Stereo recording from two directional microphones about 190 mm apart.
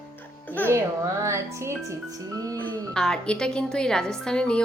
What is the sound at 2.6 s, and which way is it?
A woman's voice, 5° left (ahead or behind).